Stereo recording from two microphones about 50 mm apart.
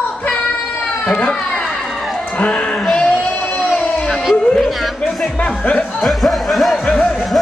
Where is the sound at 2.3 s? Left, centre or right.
Left.